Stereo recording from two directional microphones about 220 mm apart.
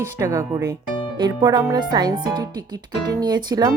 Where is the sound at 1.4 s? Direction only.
20° right (ahead or behind).